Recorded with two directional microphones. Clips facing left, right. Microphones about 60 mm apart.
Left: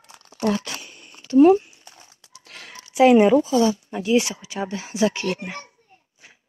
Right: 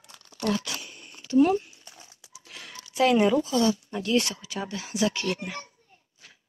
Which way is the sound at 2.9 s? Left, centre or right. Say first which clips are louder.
Left 7 dB; centre.